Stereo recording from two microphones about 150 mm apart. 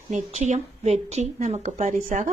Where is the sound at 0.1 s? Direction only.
50° right (ahead or behind).